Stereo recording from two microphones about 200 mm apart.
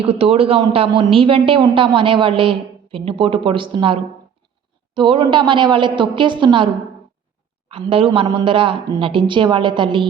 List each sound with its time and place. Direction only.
0.0 s speech: 30° right (ahead or behind)
7.7 s speech: 25° right (ahead or behind)